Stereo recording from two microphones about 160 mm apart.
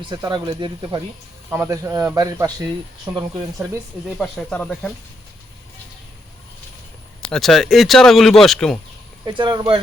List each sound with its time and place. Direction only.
0.1 s speech: 30° right (ahead or behind)
4.2 s speech: 5° left (ahead or behind)
7.2 s speech: 5° left (ahead or behind)
9.2 s speech: 25° right (ahead or behind)